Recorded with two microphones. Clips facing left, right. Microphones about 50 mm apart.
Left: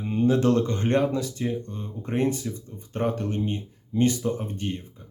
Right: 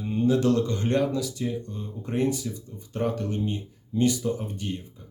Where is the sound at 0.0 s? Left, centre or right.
Left.